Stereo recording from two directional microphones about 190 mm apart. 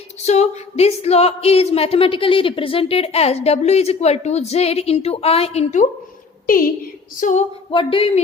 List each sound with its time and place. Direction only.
0.2 s speech: 35° left (ahead or behind)
7.2 s speech: 40° left (ahead or behind)
7.7 s speech: 30° left (ahead or behind)